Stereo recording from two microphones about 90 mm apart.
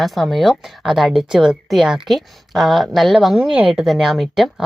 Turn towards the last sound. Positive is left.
turn(degrees=0)  # may be behind; listen again after turning